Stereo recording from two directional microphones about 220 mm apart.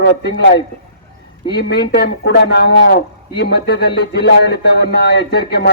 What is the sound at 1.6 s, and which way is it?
A man's voice, 50° left (ahead or behind).